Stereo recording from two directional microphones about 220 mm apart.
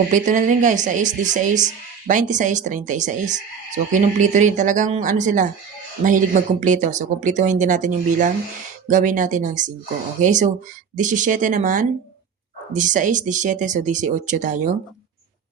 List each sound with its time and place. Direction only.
0.1 s a woman's voice: 35° right (ahead or behind)